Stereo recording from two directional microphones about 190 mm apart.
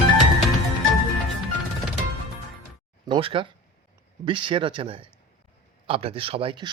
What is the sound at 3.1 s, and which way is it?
A man's voice, 30° right (ahead or behind).